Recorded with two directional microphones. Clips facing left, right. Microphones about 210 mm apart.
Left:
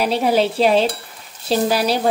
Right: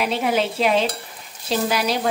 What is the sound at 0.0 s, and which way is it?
Stir, 35° left (ahead or behind).